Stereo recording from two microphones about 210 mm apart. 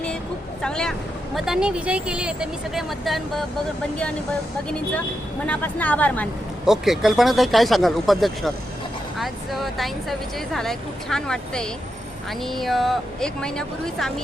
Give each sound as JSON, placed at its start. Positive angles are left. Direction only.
{"t": 0.6, "sound": "speech", "side_deg": 5}
{"t": 5.5, "sound": "a woman's voice", "side_deg": 5}